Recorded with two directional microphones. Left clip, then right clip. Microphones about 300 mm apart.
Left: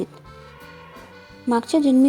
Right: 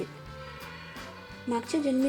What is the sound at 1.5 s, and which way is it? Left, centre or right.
Speech, left.